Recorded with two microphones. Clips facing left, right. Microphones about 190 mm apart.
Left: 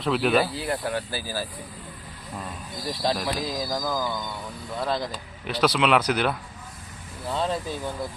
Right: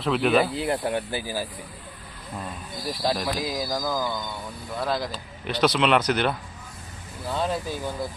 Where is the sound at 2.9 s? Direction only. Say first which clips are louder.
Even; 5° right (ahead or behind).